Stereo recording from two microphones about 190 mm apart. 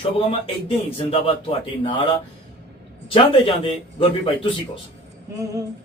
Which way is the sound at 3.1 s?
30° left (ahead or behind).